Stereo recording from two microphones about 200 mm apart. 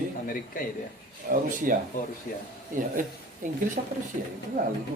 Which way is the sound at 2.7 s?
40° right (ahead or behind).